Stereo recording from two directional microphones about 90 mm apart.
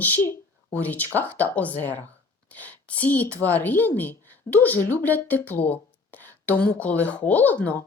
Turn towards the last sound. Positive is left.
turn(degrees=20)  # may be behind; listen again after turning